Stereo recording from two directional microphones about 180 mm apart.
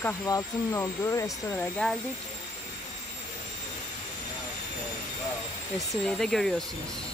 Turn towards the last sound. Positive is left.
turn(degrees=0)  # may be behind; listen again after turning